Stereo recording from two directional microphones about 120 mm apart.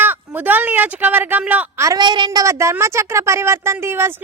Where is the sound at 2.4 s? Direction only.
25° right (ahead or behind).